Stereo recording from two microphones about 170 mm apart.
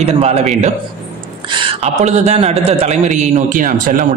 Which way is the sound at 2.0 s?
40° right (ahead or behind).